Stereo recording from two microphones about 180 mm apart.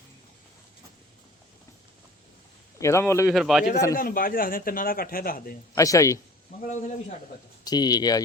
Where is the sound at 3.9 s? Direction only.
50° left (ahead or behind).